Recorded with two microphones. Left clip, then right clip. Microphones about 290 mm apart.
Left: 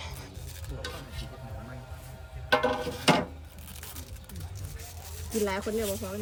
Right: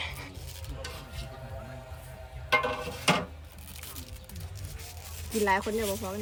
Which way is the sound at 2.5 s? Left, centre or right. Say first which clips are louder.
Left 1 dB; left.